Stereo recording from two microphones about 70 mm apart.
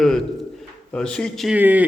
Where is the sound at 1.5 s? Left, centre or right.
Right.